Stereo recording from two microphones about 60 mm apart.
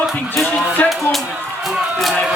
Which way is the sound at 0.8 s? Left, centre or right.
Left.